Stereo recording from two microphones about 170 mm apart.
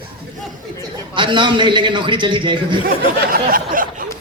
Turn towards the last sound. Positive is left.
turn(degrees=-55)  # may be behind; listen again after turning